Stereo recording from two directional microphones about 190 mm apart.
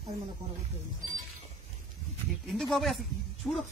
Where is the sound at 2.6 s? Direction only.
Centre (ahead or behind).